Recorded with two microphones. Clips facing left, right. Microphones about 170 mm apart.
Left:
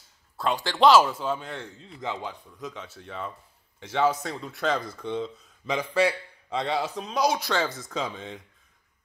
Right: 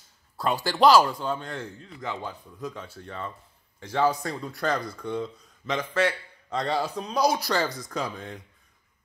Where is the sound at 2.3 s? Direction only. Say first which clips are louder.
Right 2 dB; centre (ahead or behind).